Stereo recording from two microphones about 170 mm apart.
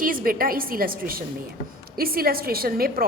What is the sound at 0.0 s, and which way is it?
A woman's voice, 55° right (ahead or behind).